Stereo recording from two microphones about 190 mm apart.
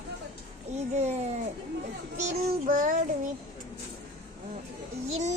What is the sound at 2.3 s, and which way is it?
Child singing, 50° right (ahead or behind).